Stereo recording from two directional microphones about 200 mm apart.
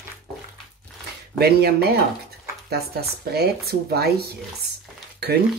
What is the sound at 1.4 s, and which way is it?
Speech, 50° right (ahead or behind).